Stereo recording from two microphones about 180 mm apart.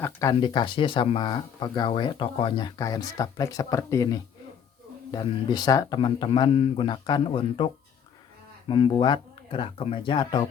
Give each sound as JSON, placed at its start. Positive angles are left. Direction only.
{"t": 0.0, "sound": "speech", "side_deg": 20}